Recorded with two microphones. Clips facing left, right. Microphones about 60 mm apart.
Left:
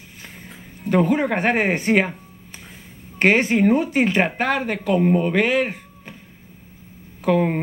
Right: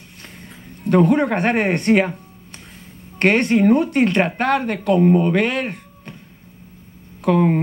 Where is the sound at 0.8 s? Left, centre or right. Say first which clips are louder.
Right 3 dB; centre.